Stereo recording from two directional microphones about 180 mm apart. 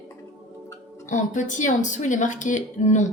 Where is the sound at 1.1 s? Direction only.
45° left (ahead or behind).